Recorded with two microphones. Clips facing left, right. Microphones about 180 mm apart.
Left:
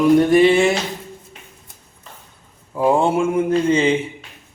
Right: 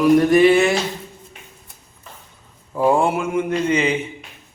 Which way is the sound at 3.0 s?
25° left (ahead or behind).